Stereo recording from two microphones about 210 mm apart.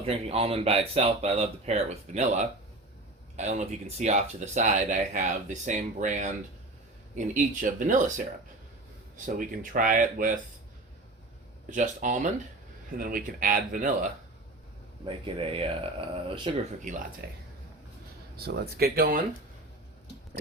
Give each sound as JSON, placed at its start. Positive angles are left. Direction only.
{"t": 0.0, "sound": "speech", "side_deg": -30}
{"t": 9.7, "sound": "speech", "side_deg": -40}
{"t": 11.7, "sound": "speech", "side_deg": -35}
{"t": 15.0, "sound": "speech", "side_deg": -25}
{"t": 16.8, "sound": "speech", "side_deg": -35}
{"t": 18.3, "sound": "speech", "side_deg": -50}